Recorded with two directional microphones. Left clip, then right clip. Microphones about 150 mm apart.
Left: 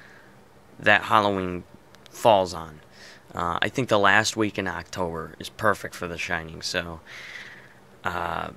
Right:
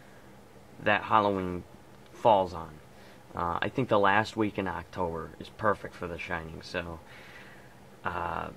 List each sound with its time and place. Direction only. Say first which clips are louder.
0.8 s speech: left 6 dB; 20° left (ahead or behind)